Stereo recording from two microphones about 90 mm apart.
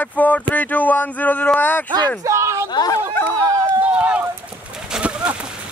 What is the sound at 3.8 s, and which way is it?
Run, 15° right (ahead or behind).